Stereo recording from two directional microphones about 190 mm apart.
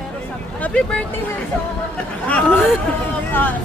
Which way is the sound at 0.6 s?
5° left (ahead or behind).